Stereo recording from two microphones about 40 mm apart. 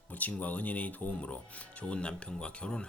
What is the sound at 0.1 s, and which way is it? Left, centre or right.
Speech, left.